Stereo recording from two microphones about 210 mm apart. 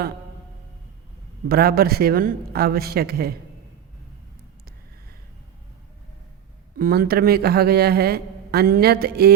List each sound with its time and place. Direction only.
1.5 s speech: 45° right (ahead or behind)
6.7 s speech: 45° right (ahead or behind)